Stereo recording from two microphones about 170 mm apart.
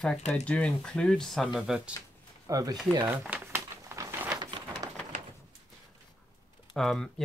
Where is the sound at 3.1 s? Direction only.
10° right (ahead or behind); by 4.9 s 25° right (ahead or behind).